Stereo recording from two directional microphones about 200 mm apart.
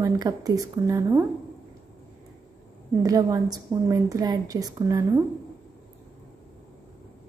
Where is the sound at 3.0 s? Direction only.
20° right (ahead or behind).